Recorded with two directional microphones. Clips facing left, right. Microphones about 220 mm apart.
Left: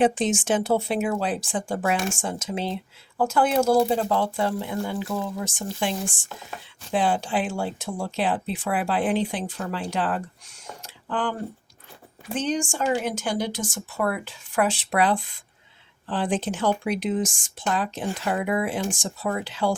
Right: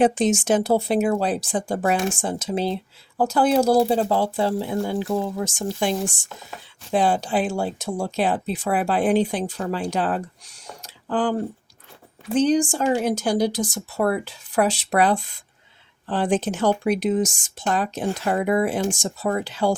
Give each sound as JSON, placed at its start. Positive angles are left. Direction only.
{"t": 0.0, "sound": "speech", "side_deg": -40}
{"t": 6.9, "sound": "speech", "side_deg": -40}
{"t": 12.4, "sound": "speech", "side_deg": -35}